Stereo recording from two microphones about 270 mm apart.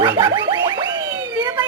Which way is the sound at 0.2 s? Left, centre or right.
Centre.